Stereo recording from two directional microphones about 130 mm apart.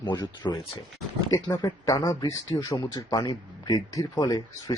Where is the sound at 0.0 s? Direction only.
35° left (ahead or behind).